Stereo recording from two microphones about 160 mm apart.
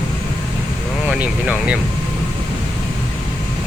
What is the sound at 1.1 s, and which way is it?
Speech, 5° right (ahead or behind).